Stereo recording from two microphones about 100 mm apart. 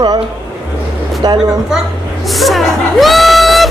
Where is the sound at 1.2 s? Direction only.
45° right (ahead or behind).